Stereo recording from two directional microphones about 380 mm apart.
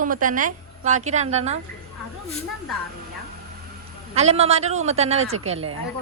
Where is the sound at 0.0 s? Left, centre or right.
Right.